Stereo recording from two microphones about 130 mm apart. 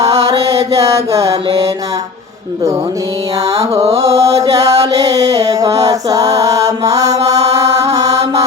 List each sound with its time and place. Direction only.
0.9 s music: 25° right (ahead or behind)
1.3 s music: 40° right (ahead or behind)
3.5 s music: 45° right (ahead or behind)
3.9 s music: 25° right (ahead or behind)
7.3 s mantra: 25° right (ahead or behind)